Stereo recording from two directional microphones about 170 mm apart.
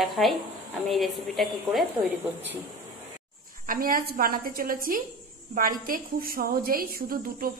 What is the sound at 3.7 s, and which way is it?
A woman's voice, 55° right (ahead or behind).